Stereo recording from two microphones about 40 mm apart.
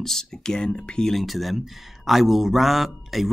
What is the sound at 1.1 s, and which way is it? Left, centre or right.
Speech, centre.